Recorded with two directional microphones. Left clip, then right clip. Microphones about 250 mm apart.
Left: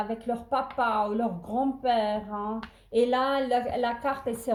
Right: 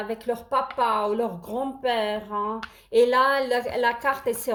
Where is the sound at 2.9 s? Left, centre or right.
Right.